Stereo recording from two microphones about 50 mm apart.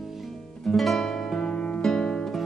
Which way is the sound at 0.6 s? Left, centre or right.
Centre.